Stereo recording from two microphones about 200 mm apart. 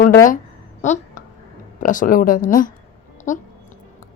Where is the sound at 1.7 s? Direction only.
40° left (ahead or behind).